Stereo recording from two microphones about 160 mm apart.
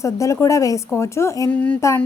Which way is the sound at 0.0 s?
20° left (ahead or behind).